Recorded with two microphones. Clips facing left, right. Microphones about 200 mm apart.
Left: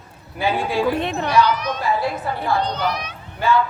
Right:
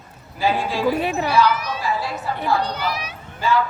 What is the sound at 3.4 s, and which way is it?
Speech, 60° left (ahead or behind).